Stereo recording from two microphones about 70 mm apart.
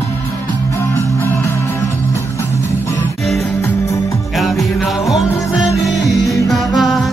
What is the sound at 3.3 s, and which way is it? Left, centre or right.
Music, left.